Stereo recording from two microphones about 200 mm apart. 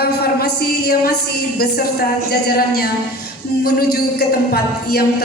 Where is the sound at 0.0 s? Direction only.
55° left (ahead or behind).